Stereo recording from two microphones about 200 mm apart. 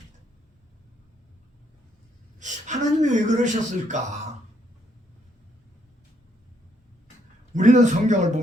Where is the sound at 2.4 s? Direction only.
35° right (ahead or behind).